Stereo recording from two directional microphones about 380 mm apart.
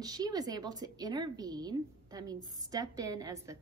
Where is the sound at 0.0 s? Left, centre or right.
Centre.